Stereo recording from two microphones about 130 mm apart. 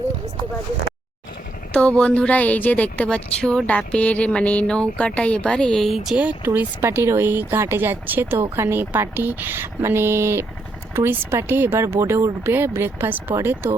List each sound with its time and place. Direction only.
1.7 s a woman's voice: 10° left (ahead or behind); by 13.7 s 20° right (ahead or behind)